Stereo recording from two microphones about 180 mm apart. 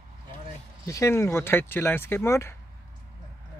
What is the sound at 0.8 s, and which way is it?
Speech, 15° left (ahead or behind).